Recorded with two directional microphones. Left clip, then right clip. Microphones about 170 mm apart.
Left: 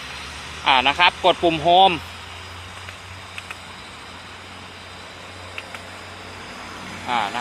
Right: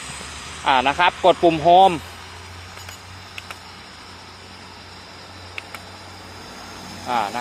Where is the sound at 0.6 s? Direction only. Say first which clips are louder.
Left 1 dB; 25° right (ahead or behind).